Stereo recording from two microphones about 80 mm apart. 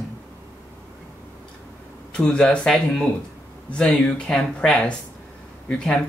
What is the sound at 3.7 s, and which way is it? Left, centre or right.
Speech, centre.